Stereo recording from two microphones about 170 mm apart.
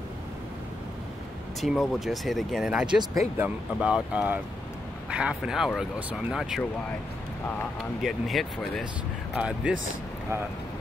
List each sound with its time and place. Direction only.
1.6 s speech: centre (ahead or behind)
3.0 s speech: 20° right (ahead or behind)
3.4 s speech: 5° right (ahead or behind)
8.0 s speech: centre (ahead or behind)